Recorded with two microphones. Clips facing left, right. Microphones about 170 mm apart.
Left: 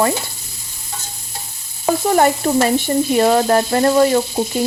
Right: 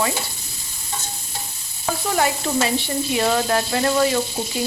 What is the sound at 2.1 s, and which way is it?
A woman's voice, 45° left (ahead or behind).